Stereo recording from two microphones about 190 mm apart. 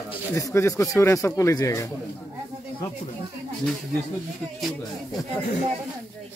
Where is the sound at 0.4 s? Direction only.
15° left (ahead or behind).